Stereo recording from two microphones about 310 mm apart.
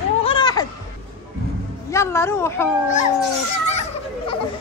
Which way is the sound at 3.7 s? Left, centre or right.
Left.